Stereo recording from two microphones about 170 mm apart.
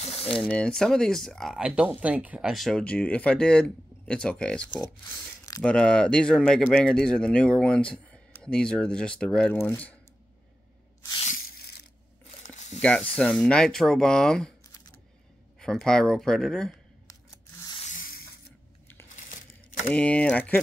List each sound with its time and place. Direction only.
0.0 s mechanisms: 35° left (ahead or behind)
0.4 s speech: 5° left (ahead or behind)
12.4 s a sound: 45° left (ahead or behind)
13.1 s speech: 5° left (ahead or behind)
15.6 s speech: 5° left (ahead or behind)
17.1 s scissors: 20° left (ahead or behind)
17.7 s a sound: 50° left (ahead or behind)
19.1 s tearing: 50° left (ahead or behind)
19.9 s speech: 5° left (ahead or behind)